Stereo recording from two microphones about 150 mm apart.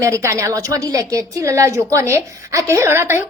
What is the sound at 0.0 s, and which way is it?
A woman's voice, 20° right (ahead or behind).